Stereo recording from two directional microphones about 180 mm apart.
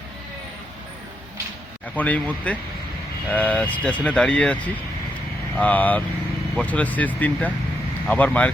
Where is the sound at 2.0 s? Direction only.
10° left (ahead or behind).